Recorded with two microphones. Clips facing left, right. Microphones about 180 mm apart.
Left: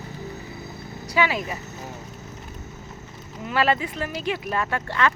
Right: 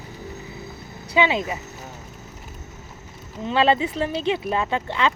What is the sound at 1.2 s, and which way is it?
Speech, 20° right (ahead or behind).